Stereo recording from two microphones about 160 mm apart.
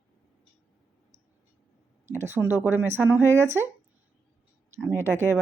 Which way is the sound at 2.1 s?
15° right (ahead or behind).